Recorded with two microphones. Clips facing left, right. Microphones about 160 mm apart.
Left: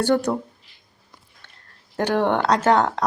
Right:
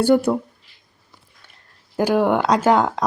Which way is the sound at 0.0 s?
10° right (ahead or behind).